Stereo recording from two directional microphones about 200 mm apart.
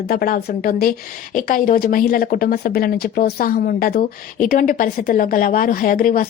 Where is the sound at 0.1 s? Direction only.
50° left (ahead or behind).